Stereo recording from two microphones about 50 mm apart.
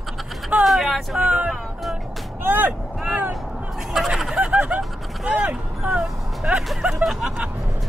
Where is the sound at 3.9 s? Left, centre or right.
Centre.